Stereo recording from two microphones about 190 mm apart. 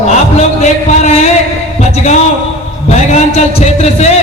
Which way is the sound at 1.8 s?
35° left (ahead or behind).